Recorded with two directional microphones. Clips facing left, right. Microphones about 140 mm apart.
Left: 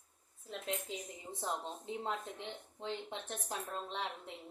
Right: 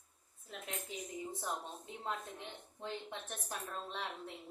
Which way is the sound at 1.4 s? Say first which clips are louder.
Left 3 dB; 25° left (ahead or behind).